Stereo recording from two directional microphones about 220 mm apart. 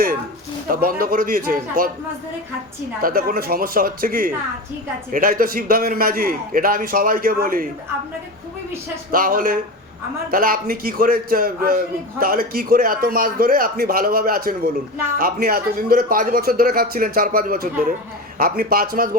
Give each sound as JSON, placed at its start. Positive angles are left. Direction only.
{"t": 0.7, "sound": "a man's voice", "side_deg": -40}
{"t": 3.0, "sound": "a man's voice", "side_deg": -40}
{"t": 9.1, "sound": "a man's voice", "side_deg": -40}